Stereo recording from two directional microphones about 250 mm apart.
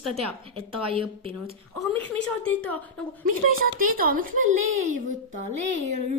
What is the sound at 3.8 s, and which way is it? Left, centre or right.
A woman's voice, right.